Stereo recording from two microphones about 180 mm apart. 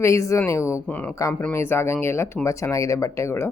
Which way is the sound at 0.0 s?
15° left (ahead or behind).